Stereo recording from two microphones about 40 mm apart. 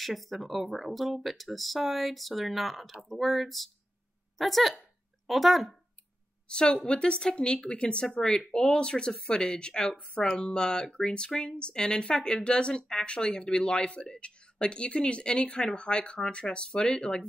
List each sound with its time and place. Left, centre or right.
0.0 s speech: centre
6.5 s speech: centre